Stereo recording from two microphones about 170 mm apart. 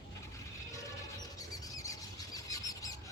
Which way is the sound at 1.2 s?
20° left (ahead or behind).